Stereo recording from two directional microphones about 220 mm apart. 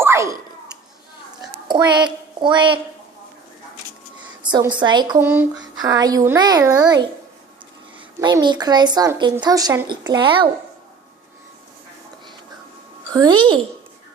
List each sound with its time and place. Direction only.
0.0 s a sound: 10° right (ahead or behind)
1.6 s a woman's voice: 20° right (ahead or behind)
4.5 s a child's voice: 20° right (ahead or behind)
8.2 s speech: 20° right (ahead or behind)
13.1 s speech: 20° right (ahead or behind)